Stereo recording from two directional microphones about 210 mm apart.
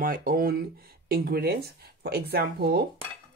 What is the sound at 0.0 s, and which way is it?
Speech, 45° right (ahead or behind).